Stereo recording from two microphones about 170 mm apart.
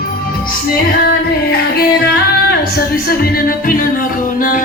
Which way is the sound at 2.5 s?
65° left (ahead or behind).